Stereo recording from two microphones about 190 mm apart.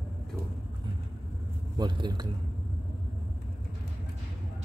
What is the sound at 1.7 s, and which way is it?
Speech, 25° right (ahead or behind).